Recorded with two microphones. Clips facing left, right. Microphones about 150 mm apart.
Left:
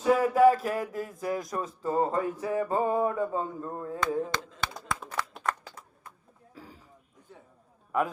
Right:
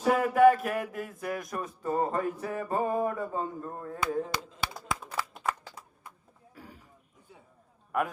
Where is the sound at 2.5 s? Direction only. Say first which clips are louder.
Left 5 dB; 30° left (ahead or behind).